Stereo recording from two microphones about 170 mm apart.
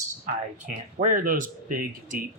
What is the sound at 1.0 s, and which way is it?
Speech, 50° right (ahead or behind).